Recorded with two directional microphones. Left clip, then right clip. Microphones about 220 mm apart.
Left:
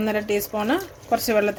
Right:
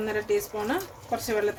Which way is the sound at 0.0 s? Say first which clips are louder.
Left 3 dB; 45° left (ahead or behind).